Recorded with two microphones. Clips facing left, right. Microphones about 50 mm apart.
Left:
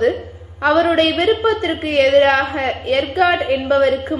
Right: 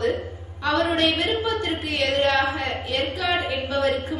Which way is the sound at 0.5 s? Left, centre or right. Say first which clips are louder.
Left 8 dB; left.